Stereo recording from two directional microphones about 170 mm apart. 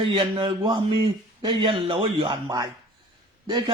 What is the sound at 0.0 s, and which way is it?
A man's voice, 30° right (ahead or behind).